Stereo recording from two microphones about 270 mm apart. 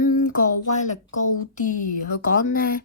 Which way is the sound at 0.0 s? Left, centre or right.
Left.